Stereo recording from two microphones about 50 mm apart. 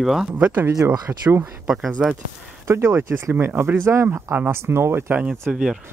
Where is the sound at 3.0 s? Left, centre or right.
Right.